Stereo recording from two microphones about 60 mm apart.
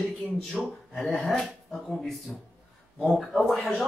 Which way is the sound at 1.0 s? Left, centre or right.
Centre.